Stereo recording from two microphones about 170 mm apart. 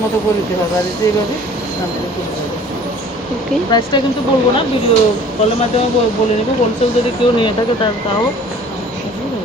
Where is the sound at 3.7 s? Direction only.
25° left (ahead or behind).